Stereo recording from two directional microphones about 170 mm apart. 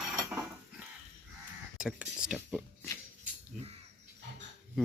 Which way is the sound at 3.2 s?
35° right (ahead or behind).